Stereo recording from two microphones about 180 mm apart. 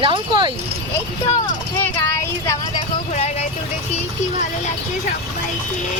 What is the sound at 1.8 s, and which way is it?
Speech, 15° left (ahead or behind).